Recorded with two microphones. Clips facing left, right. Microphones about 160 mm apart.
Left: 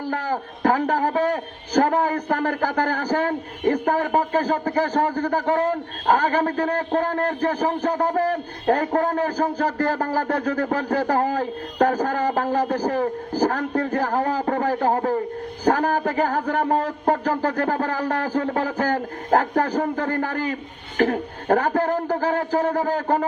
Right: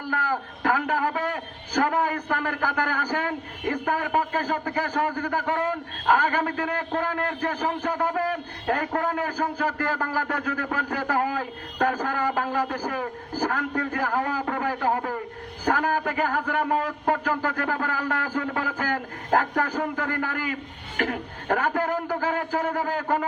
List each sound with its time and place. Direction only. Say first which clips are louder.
0.0 s a man's voice: left 3 dB; 45° left (ahead or behind)